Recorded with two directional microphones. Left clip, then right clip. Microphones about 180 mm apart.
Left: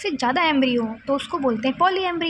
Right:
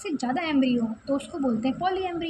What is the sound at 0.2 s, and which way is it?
A woman's voice, 20° left (ahead or behind).